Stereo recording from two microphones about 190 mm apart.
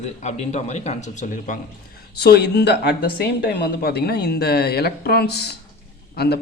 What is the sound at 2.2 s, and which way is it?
A man's voice, 60° left (ahead or behind).